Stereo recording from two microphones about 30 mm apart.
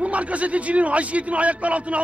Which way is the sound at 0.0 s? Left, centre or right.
Right.